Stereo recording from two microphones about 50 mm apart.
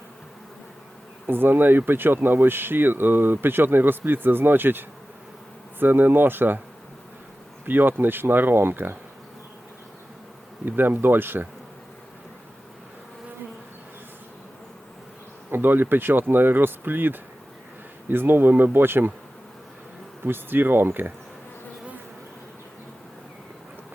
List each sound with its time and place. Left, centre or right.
1.3 s speech: right
7.6 s speech: right
10.7 s speech: right
15.4 s speech: right
20.2 s speech: right